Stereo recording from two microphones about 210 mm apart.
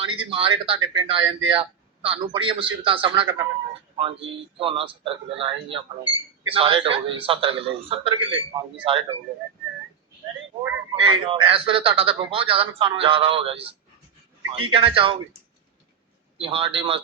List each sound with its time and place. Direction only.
0.0 s a man's voice: 25° right (ahead or behind)
10.6 s a man's voice: 25° right (ahead or behind)
16.4 s a man's voice: 25° right (ahead or behind)